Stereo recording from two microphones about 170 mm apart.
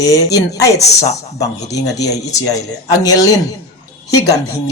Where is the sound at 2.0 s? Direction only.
20° left (ahead or behind).